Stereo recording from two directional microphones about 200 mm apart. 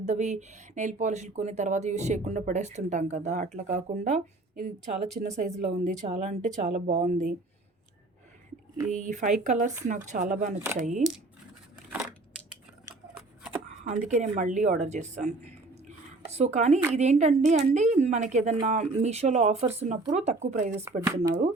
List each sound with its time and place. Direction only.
0.0 s speech: 35° right (ahead or behind)
8.9 s speech: 40° right (ahead or behind)
11.9 s crushing: 5° right (ahead or behind)
14.1 s speech: 40° right (ahead or behind)
20.7 s speech: 15° right (ahead or behind)